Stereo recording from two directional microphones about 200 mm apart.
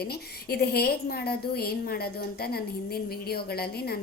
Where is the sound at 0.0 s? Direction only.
50° left (ahead or behind).